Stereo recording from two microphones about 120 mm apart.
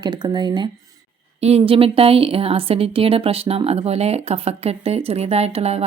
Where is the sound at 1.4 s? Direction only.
60° right (ahead or behind).